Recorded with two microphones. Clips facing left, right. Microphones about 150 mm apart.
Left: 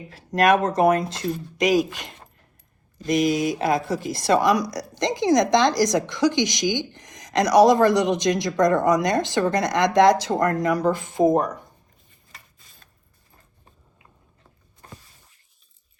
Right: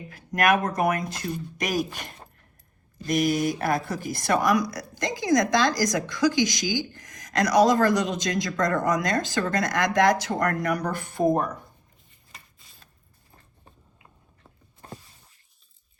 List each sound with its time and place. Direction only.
0.3 s a woman's voice: 25° left (ahead or behind)
3.5 s a woman's voice: 20° left (ahead or behind)